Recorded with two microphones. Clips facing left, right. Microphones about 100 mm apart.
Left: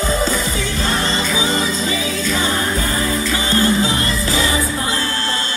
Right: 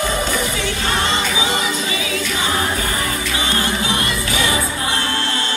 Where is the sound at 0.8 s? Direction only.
35° left (ahead or behind).